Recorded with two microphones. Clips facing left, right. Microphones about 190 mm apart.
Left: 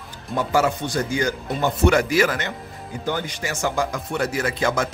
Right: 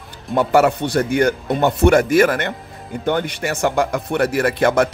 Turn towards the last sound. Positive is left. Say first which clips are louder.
# right 7 dB
turn(degrees=-65)  # may be behind; listen again after turning